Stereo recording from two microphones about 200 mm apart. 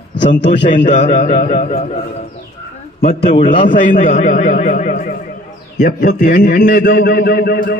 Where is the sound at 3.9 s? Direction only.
40° left (ahead or behind).